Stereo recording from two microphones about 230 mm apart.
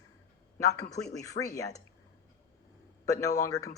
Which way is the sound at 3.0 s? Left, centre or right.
Centre.